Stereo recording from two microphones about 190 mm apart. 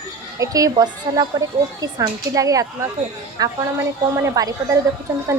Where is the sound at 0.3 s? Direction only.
20° right (ahead or behind).